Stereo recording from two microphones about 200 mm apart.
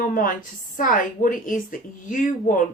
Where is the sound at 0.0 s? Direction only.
45° left (ahead or behind).